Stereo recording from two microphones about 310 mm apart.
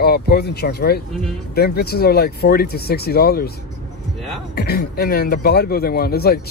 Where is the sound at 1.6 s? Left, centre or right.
Left.